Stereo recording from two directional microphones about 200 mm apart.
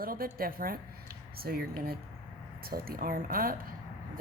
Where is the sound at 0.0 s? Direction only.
45° right (ahead or behind).